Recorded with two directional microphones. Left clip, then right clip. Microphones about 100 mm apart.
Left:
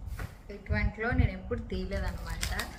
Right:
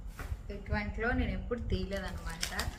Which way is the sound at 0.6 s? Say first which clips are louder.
Left 2 dB; 15° right (ahead or behind).